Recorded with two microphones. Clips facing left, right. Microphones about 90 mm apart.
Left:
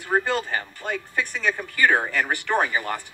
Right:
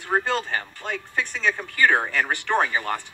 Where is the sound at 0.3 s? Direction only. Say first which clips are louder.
Even; 15° left (ahead or behind).